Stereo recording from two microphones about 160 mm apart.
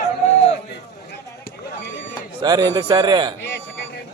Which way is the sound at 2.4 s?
25° right (ahead or behind).